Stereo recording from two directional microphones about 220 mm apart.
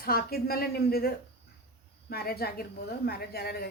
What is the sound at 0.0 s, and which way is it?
A woman's voice, 45° left (ahead or behind).